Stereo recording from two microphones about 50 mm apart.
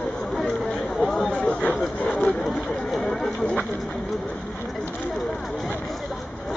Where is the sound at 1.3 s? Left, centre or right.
Left.